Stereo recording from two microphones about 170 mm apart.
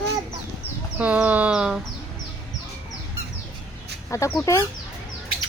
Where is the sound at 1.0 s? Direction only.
10° right (ahead or behind).